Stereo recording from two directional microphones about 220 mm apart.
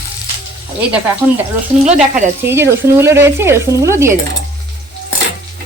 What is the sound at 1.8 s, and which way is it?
Speech, 30° right (ahead or behind).